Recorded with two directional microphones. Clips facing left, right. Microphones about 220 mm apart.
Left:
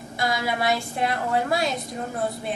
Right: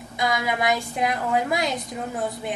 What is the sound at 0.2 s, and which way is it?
A woman's voice, 15° right (ahead or behind).